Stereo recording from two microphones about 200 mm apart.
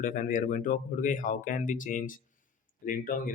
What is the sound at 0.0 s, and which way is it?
Speech, 40° left (ahead or behind).